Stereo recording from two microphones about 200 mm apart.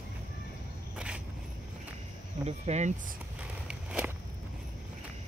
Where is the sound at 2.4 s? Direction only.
35° right (ahead or behind).